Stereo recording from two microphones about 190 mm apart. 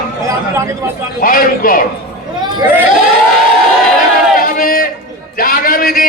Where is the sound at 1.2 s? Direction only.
50° left (ahead or behind).